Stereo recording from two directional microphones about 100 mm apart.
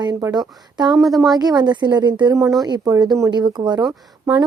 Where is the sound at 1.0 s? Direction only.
Centre (ahead or behind).